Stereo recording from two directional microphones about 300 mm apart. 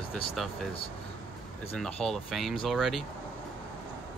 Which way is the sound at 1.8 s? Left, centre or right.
Centre.